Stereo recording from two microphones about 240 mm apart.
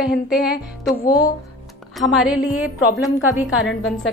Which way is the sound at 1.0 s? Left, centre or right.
Centre.